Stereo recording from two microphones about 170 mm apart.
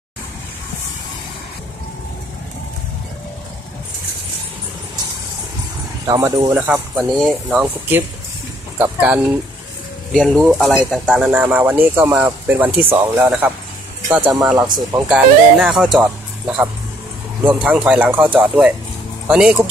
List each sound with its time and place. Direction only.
6.0 s speech: 20° right (ahead or behind)
6.5 s speech: 5° right (ahead or behind)